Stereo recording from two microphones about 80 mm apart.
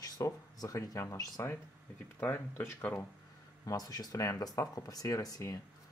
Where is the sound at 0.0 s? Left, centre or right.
Left.